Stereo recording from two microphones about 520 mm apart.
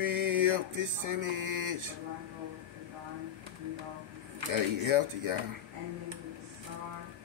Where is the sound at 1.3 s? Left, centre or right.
Right.